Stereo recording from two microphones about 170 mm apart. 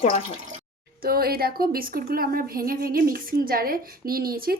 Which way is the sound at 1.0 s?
65° right (ahead or behind).